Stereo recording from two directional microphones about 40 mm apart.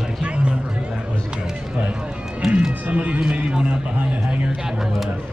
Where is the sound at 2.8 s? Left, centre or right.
Right.